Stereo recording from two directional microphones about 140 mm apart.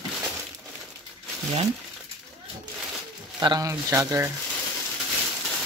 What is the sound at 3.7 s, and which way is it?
Speech, 20° right (ahead or behind).